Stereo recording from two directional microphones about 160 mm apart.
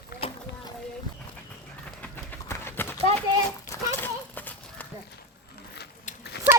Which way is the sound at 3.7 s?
15° left (ahead or behind).